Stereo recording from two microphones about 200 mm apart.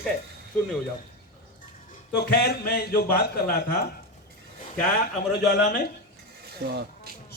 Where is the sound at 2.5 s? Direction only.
50° left (ahead or behind).